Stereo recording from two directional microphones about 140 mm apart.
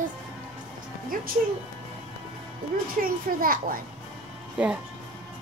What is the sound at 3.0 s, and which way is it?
Speech, 75° right (ahead or behind).